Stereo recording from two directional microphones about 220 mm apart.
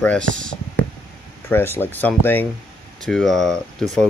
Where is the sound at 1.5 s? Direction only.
10° left (ahead or behind).